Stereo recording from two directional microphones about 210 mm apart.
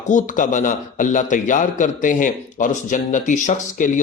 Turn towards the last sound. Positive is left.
turn(degrees=35)  # may be behind; listen again after turning